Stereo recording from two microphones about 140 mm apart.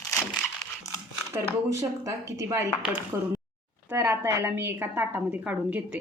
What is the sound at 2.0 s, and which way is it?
A woman's voice, 20° right (ahead or behind).